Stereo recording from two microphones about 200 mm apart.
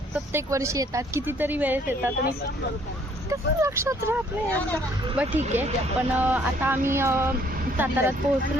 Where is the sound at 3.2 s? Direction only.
15° right (ahead or behind).